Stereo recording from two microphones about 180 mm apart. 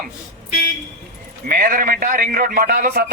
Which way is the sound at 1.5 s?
50° right (ahead or behind).